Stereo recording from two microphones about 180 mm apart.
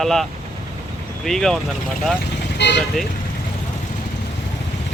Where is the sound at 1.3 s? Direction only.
Centre (ahead or behind).